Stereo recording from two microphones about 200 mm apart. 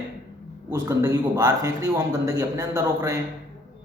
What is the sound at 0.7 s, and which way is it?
A man's voice, 15° right (ahead or behind).